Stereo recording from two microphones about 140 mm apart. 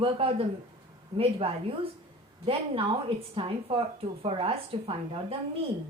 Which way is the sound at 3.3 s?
40° right (ahead or behind).